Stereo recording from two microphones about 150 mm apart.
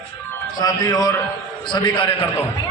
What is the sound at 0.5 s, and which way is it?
A man's voice, 25° left (ahead or behind).